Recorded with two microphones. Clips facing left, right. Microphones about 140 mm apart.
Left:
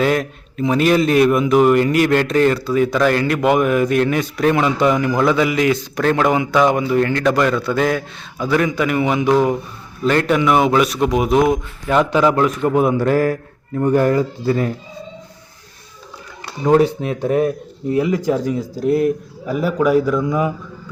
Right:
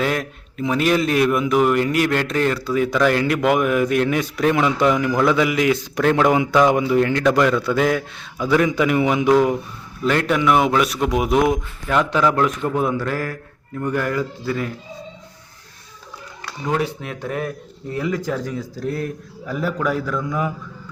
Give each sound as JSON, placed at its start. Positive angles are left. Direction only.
{"t": 0.0, "sound": "a man's voice", "side_deg": 0}
{"t": 8.6, "sound": "a man's voice", "side_deg": -15}
{"t": 9.2, "sound": "speech", "side_deg": 20}
{"t": 10.1, "sound": "a man's voice", "side_deg": 0}
{"t": 11.9, "sound": "a man's voice", "side_deg": 10}
{"t": 13.0, "sound": "speech", "side_deg": 25}
{"t": 16.8, "sound": "a man's voice", "side_deg": 25}